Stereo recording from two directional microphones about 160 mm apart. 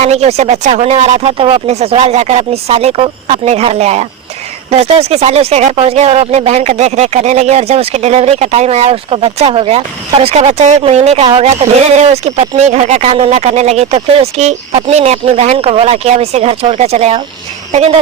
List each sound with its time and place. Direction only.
0.0 s speech: 40° right (ahead or behind)